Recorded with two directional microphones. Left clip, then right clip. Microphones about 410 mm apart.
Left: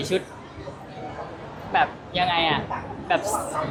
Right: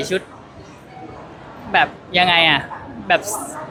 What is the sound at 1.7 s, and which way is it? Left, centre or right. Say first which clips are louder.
Speech: right 6 dB; right.